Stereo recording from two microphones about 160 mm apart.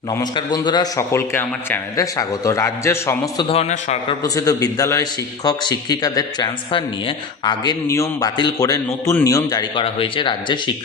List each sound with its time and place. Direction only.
0.1 s a man's voice: 25° left (ahead or behind)
3.5 s a man's voice: 45° left (ahead or behind)
4.2 s a man's voice: 20° left (ahead or behind)